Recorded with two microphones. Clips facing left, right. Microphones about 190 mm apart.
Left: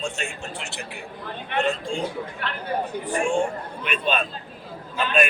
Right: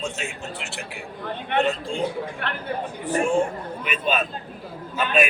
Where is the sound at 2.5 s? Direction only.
60° right (ahead or behind).